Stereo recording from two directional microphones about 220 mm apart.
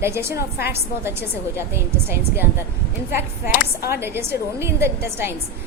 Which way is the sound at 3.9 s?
10° right (ahead or behind).